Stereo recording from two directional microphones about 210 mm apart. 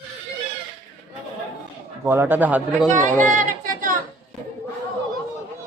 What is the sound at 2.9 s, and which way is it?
Speech, 35° right (ahead or behind).